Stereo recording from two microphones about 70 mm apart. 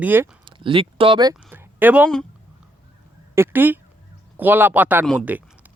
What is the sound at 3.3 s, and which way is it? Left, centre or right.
Speech, right.